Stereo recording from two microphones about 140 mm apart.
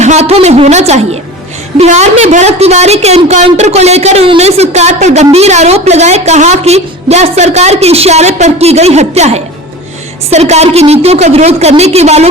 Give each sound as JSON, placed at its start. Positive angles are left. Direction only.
{"t": 0.0, "sound": "speech", "side_deg": -55}